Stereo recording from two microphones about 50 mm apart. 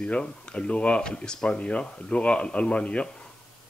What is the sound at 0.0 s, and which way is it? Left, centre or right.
Speech, left.